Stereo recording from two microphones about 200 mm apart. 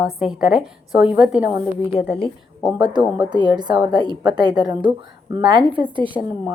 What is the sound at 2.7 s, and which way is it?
A woman's voice, 20° right (ahead or behind).